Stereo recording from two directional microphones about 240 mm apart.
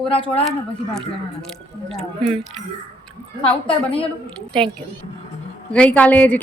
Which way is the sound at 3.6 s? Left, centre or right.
Left.